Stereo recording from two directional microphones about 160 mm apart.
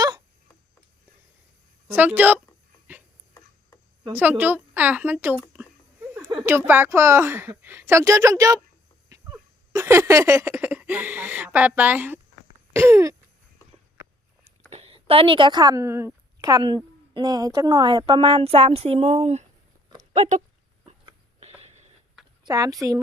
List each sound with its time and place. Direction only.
1.9 s speech: 10° right (ahead or behind)
4.1 s a woman's voice: 10° right (ahead or behind)
9.7 s a woman's voice: 15° right (ahead or behind)
14.4 s a woman's voice: 40° right (ahead or behind)
20.0 s a sound: 50° right (ahead or behind)
20.8 s a sound: 35° right (ahead or behind)
22.4 s speech: 20° right (ahead or behind)